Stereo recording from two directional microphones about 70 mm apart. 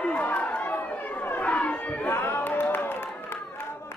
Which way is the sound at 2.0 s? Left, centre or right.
Left.